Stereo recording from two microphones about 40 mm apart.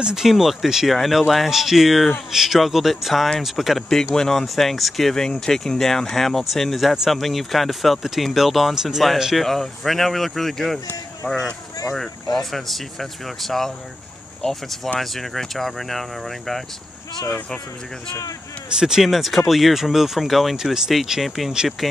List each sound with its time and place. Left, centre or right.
0.0 s speech: centre
4.1 s speech: centre
5.1 s speech: centre
9.4 s speech: centre
11.2 s speech: left
11.9 s speech: centre
18.8 s speech: centre
19.0 s speech: centre